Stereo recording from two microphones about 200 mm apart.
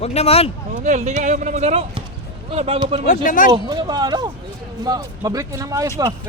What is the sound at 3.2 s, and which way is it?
Speech, 40° left (ahead or behind).